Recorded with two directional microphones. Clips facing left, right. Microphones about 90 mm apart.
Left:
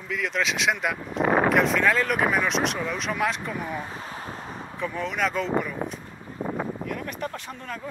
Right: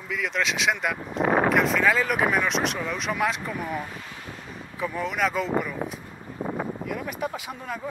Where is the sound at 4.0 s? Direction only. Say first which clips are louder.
Left 4 dB; 35° left (ahead or behind).